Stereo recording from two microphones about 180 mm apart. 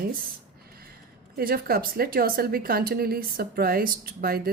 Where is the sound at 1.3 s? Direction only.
55° right (ahead or behind).